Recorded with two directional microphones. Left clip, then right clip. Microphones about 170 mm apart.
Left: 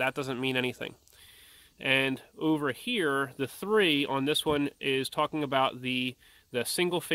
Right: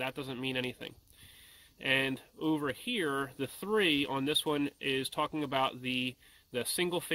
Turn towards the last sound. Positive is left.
turn(degrees=45)  # may be behind; listen again after turning